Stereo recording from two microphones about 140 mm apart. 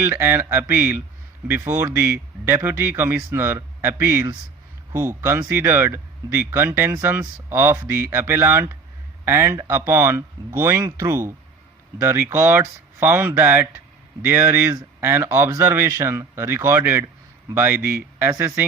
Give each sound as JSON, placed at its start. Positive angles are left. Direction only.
{"t": 0.0, "sound": "speech", "side_deg": -15}